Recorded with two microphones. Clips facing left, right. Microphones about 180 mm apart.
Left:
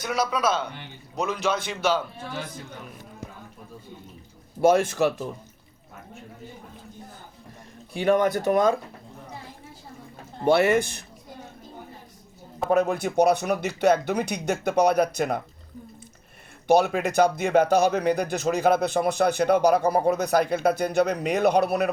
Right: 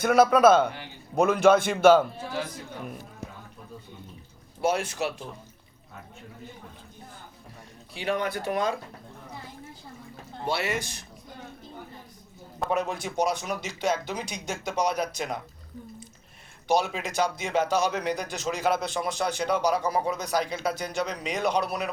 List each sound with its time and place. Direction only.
0.0 s a man's voice: 50° right (ahead or behind)
4.6 s speech: 45° left (ahead or behind)
7.9 s speech: 50° left (ahead or behind)
10.4 s speech: 55° left (ahead or behind)
12.7 s speech: 55° left (ahead or behind)
16.6 s speech: 55° left (ahead or behind)